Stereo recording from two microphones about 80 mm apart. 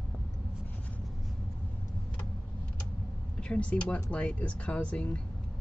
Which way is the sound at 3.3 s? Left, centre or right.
Centre.